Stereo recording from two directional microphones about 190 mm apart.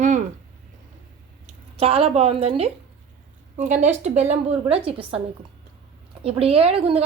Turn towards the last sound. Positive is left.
turn(degrees=-30)  # may be behind; listen again after turning